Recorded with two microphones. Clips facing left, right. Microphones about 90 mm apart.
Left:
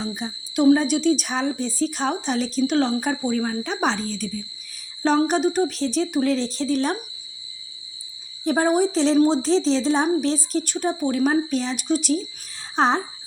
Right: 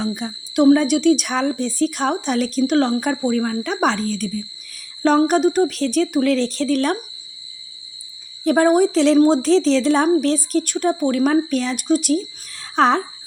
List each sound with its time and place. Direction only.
0.0 s speech: 60° right (ahead or behind)
5.0 s a sound: 50° right (ahead or behind)
5.5 s speech: 50° right (ahead or behind)
8.4 s speech: 55° right (ahead or behind)
9.1 s a sound: 45° right (ahead or behind)
9.4 s speech: 65° right (ahead or behind)